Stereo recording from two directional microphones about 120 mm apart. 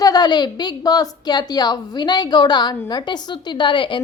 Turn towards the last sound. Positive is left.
turn(degrees=45)  # may be behind; listen again after turning